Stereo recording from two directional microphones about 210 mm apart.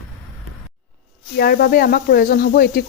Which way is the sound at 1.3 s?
45° left (ahead or behind).